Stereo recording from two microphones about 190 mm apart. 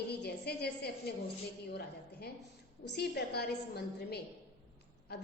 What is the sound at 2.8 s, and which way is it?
A woman's voice, 60° left (ahead or behind).